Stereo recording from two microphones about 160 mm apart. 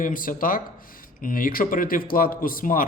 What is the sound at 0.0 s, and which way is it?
Speech, 60° left (ahead or behind).